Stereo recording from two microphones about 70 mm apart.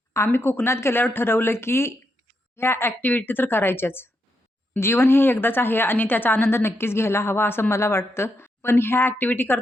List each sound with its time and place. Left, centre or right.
0.3 s a woman's voice: left